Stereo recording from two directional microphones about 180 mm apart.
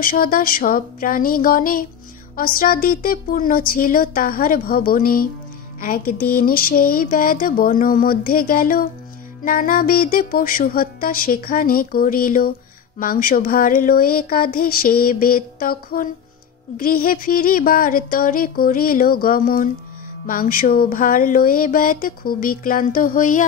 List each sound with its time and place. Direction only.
0.0 s music: 55° left (ahead or behind)